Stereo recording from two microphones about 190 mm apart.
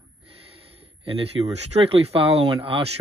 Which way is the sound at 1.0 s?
30° right (ahead or behind).